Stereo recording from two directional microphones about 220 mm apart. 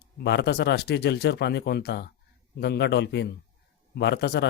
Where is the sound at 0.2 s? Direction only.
50° left (ahead or behind).